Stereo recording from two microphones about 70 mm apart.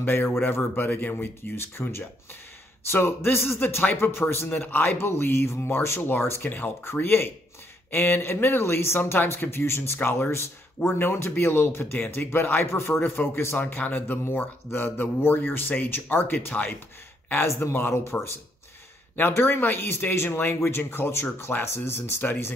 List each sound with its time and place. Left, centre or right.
0.0 s speech: left